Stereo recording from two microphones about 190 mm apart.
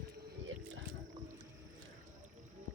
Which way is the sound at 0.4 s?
90° right.